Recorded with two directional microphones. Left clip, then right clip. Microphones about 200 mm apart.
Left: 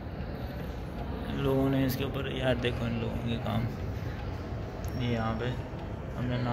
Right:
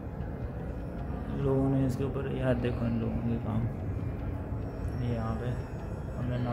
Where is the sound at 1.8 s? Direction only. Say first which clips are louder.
Left 1 dB; 25° right (ahead or behind).